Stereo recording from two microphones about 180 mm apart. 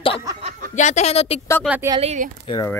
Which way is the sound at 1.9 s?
35° right (ahead or behind).